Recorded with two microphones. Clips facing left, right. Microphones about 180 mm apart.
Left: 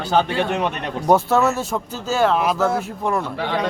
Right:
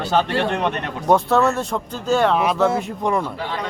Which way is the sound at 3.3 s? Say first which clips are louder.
Left 4 dB; 75° left (ahead or behind).